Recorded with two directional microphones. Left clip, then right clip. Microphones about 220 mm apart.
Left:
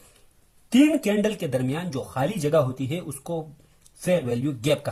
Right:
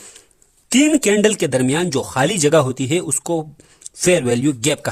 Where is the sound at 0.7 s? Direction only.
45° right (ahead or behind).